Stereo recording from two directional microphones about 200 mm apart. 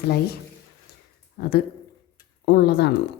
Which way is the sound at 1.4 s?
50° left (ahead or behind).